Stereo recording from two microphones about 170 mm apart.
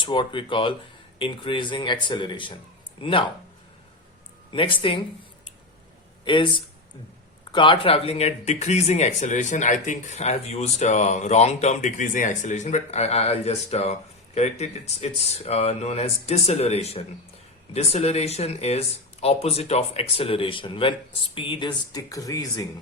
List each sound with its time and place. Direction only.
0.0 s speech: 30° left (ahead or behind)
4.5 s speech: 30° left (ahead or behind)
6.2 s speech: 30° left (ahead or behind)